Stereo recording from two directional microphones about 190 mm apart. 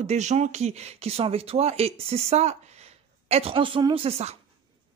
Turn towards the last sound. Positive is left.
turn(degrees=-30)  # may be behind; listen again after turning